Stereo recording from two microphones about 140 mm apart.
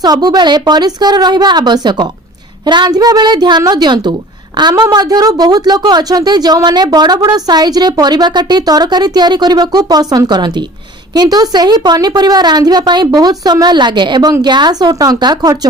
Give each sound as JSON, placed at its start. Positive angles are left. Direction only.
{"t": 0.0, "sound": "a woman's voice", "side_deg": -30}